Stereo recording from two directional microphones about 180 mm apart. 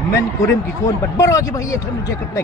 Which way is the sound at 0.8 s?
20° left (ahead or behind).